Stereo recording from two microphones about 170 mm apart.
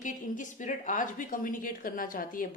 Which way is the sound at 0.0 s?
50° left (ahead or behind).